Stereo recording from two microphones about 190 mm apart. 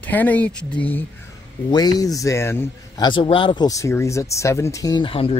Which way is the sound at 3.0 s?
25° left (ahead or behind).